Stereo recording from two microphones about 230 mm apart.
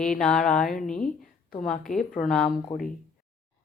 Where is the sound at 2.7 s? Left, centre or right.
Left.